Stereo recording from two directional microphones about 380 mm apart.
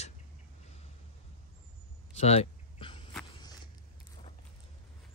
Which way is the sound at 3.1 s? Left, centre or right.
Centre.